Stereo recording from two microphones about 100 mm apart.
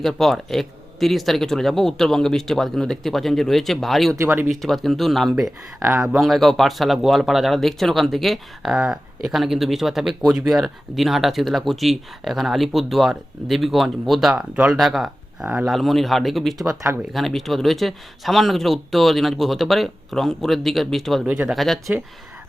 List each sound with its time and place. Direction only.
0.0 s speech: 5° left (ahead or behind)
4.1 s speech: 25° right (ahead or behind)
4.6 s speech: centre (ahead or behind)
16.6 s speech: 30° right (ahead or behind)
17.1 s speech: centre (ahead or behind)
21.2 s speech: 20° right (ahead or behind)
21.5 s speech: centre (ahead or behind)